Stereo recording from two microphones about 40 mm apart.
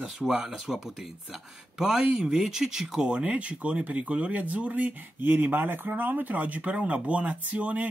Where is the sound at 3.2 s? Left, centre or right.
Right.